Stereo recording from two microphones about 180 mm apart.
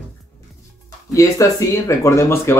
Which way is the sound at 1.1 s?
20° left (ahead or behind).